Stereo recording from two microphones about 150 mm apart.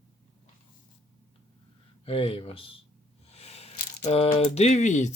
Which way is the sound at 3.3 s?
45° left (ahead or behind).